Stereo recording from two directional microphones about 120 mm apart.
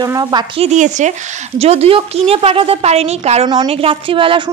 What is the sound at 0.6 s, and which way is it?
Speech, 75° right (ahead or behind).